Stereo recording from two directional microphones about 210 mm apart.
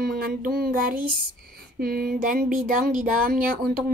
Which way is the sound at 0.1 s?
45° right (ahead or behind).